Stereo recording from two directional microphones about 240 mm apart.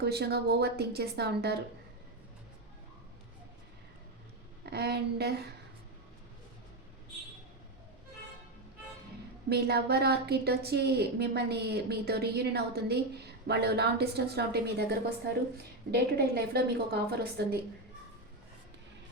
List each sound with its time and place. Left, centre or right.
0.0 s a woman's voice: right
4.6 s a woman's voice: right
9.5 s a woman's voice: right